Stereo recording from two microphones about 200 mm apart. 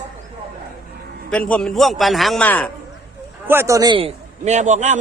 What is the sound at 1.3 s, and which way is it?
A man's voice, 5° left (ahead or behind).